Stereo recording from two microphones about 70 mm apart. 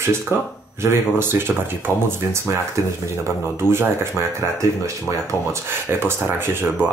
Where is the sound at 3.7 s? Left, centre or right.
Right.